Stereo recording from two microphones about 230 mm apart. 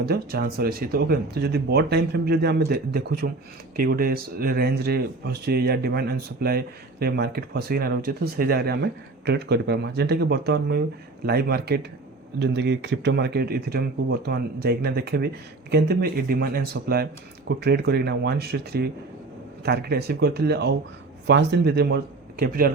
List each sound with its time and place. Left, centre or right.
0.0 s speech: right